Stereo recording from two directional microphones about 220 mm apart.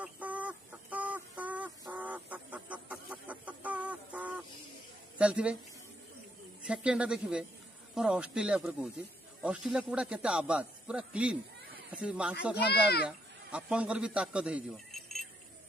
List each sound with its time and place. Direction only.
0.0 s chicken: 5° right (ahead or behind)
5.2 s a man's voice: 5° right (ahead or behind)
6.6 s a man's voice: 5° right (ahead or behind)
12.5 s a child's voice: 45° left (ahead or behind)
13.0 s a man's voice: 5° right (ahead or behind)